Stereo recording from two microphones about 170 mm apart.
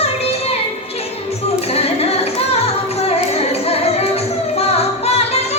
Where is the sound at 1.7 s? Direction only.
35° left (ahead or behind).